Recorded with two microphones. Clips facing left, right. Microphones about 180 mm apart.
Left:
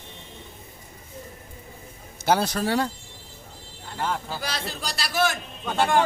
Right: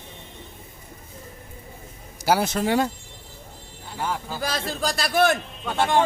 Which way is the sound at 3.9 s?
5° right (ahead or behind).